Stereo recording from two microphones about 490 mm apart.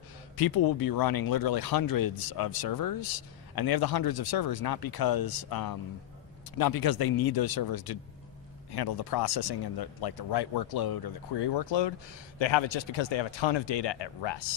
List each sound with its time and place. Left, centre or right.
0.3 s speech: left